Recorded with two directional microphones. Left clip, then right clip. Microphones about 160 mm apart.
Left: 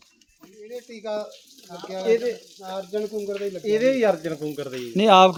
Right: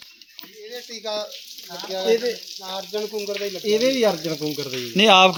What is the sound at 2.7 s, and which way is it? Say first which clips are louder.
Frying: even; 90° left.